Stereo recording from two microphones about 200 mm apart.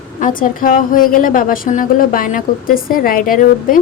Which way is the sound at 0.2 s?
45° left (ahead or behind).